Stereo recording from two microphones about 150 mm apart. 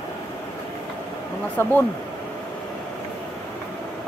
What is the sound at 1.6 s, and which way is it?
Speech, 15° left (ahead or behind).